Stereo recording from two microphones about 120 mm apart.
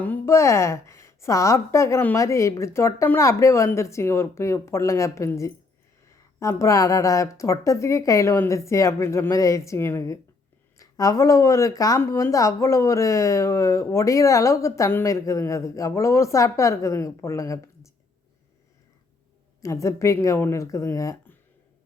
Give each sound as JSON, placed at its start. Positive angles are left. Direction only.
{"t": 0.0, "sound": "a woman's voice", "side_deg": 20}
{"t": 19.6, "sound": "speech", "side_deg": 25}